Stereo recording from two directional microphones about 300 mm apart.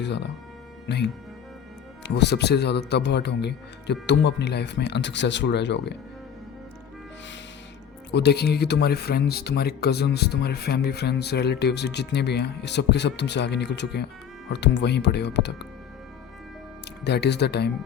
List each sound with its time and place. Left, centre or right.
0.0 s speech: left
8.1 s speech: left
17.0 s speech: left